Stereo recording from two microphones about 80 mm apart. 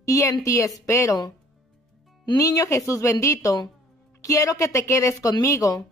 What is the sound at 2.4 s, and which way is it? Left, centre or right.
Speech, left.